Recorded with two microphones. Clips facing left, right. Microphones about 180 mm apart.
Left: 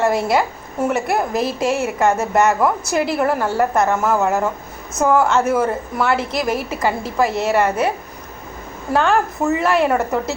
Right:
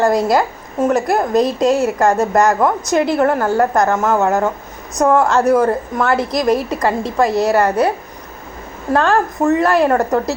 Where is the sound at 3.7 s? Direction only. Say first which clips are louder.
Right 2 dB; 35° right (ahead or behind).